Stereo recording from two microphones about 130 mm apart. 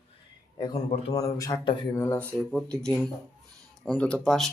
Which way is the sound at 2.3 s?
5° left (ahead or behind).